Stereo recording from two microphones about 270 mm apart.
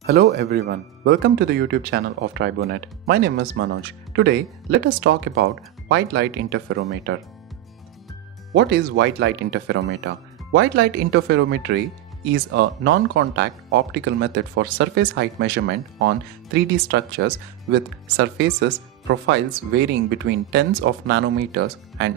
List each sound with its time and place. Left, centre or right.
0.0 s speech: right
8.5 s speech: right